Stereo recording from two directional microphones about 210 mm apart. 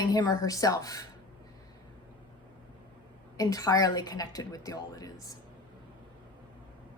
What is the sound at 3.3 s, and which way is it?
A woman's voice, 15° left (ahead or behind).